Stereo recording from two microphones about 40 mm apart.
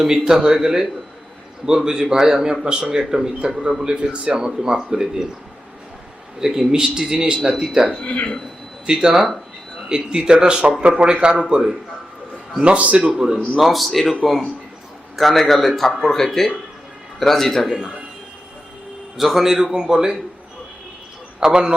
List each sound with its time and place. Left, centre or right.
0.0 s a man's voice: centre
3.8 s a man's voice: right
6.4 s a man's voice: centre
12.6 s speech: right
13.1 s a man's voice: centre
13.6 s a man's voice: centre
17.7 s a man's voice: centre
19.1 s a man's voice: centre
21.4 s speech: right